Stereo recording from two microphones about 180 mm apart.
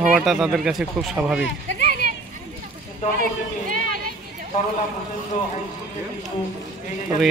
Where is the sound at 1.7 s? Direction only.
45° right (ahead or behind).